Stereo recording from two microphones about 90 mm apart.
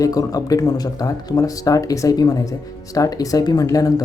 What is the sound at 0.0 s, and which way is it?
Speech, 45° left (ahead or behind).